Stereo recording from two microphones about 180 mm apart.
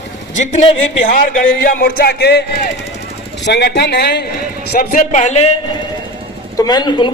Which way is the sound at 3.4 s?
70° left (ahead or behind).